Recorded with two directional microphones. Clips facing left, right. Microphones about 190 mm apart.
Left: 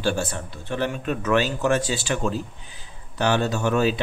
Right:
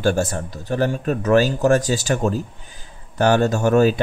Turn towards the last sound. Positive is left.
turn(degrees=-45)  # may be behind; listen again after turning